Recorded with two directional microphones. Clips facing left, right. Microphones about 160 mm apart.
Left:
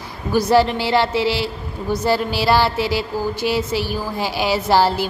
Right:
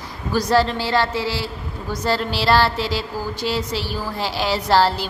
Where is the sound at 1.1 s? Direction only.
70° left (ahead or behind).